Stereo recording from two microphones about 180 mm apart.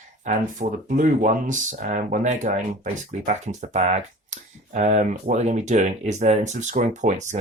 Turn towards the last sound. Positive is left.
turn(degrees=-40)  # may be behind; listen again after turning